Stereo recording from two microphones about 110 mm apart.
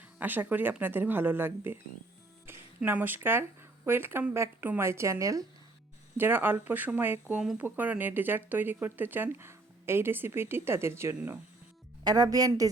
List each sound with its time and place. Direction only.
0.2 s speech: 15° right (ahead or behind)
6.1 s speech: 20° right (ahead or behind)
12.0 s a woman's voice: 35° right (ahead or behind)